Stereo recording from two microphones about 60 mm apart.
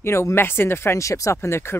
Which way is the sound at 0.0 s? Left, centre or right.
Left.